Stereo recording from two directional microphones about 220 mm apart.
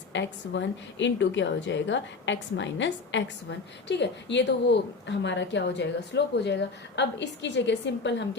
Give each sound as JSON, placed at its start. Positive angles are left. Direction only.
{"t": 0.1, "sound": "a woman's voice", "side_deg": 55}